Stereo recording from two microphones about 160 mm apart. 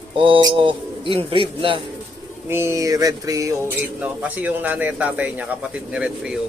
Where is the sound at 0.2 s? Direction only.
30° right (ahead or behind).